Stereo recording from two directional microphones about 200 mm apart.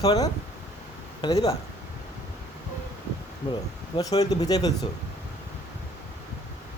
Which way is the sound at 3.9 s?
20° left (ahead or behind).